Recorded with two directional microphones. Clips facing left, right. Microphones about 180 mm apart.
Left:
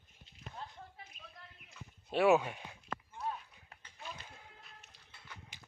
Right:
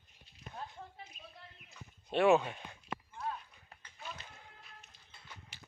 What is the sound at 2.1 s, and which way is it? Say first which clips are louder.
Speech: right 1 dB; 5° left (ahead or behind).